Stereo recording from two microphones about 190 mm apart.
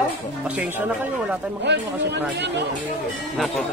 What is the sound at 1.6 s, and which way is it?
Speech, 65° right (ahead or behind).